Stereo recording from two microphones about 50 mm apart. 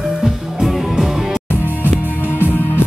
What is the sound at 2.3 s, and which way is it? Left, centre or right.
Music, left.